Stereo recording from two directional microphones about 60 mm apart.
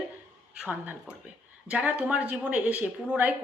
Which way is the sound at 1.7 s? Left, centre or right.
Right.